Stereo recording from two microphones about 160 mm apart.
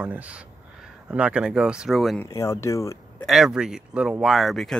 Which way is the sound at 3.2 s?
5° right (ahead or behind).